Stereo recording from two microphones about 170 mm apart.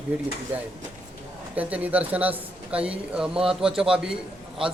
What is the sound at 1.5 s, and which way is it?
Speech, 10° right (ahead or behind).